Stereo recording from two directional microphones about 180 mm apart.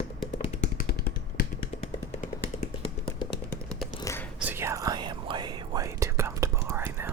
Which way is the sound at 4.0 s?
15° left (ahead or behind).